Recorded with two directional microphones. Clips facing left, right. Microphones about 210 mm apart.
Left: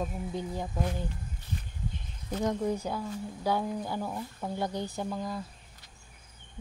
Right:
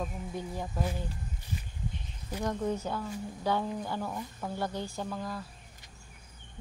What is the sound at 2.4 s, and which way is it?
A woman's voice, 10° left (ahead or behind).